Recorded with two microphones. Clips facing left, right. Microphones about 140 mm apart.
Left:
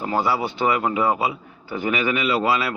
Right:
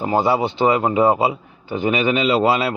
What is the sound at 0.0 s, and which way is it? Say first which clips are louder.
Speech: right 4 dB; 25° right (ahead or behind).